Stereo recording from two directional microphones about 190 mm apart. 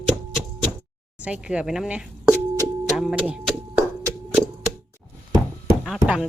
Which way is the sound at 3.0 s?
5° right (ahead or behind).